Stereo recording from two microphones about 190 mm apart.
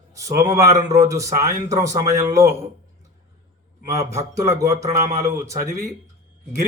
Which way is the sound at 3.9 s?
15° right (ahead or behind).